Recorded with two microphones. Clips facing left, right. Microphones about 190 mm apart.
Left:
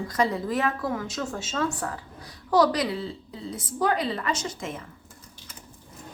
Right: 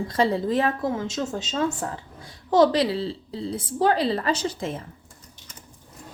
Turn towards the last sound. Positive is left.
turn(degrees=-30)  # may be behind; listen again after turning